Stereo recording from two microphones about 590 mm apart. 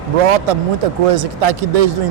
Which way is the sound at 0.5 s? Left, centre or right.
Right.